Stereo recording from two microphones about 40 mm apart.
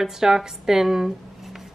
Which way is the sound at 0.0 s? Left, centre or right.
Centre.